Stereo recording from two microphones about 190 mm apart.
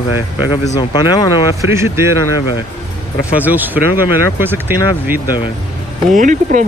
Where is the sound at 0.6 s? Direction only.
20° left (ahead or behind).